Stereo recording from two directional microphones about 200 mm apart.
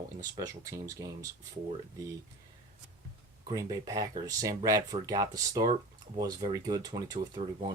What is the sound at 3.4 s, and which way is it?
Speech, 15° right (ahead or behind).